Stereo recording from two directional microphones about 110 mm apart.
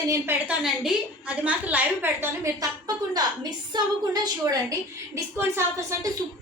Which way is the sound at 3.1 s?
40° right (ahead or behind).